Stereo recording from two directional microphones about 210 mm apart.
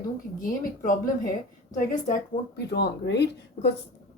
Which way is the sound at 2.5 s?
50° left (ahead or behind).